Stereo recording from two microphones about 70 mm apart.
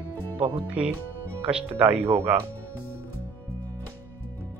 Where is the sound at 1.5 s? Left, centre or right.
Centre.